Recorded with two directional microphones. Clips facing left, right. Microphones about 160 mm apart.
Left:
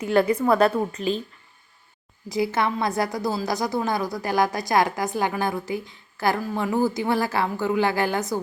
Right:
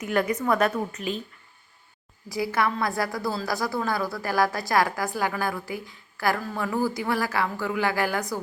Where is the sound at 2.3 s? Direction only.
25° left (ahead or behind).